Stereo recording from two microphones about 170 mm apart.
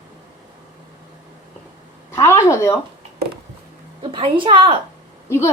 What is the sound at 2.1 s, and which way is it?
Speech, 15° left (ahead or behind).